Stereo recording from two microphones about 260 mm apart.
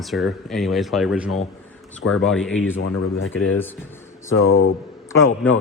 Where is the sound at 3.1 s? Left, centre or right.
Left.